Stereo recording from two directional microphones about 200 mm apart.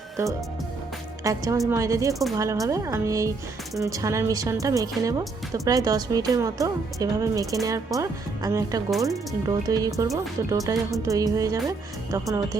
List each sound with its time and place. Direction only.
1.2 s speech: 15° right (ahead or behind)